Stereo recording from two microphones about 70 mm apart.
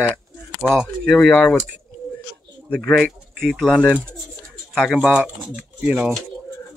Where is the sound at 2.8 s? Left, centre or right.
Centre.